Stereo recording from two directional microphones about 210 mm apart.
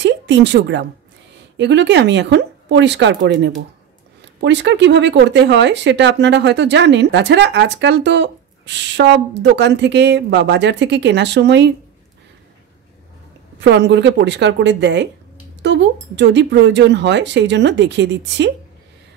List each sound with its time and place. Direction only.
0.0 s a woman's voice: 55° right (ahead or behind)
13.6 s speech: 55° right (ahead or behind)